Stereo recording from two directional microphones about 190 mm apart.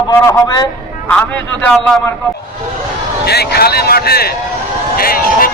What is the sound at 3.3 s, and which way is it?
Speech, 55° left (ahead or behind).